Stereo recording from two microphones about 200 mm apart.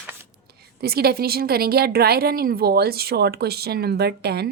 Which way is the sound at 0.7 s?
50° right (ahead or behind).